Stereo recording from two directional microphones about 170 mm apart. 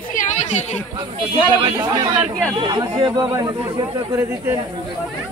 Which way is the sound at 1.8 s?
25° right (ahead or behind).